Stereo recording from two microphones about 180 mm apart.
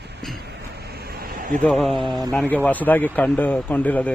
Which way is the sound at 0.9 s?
60° right (ahead or behind).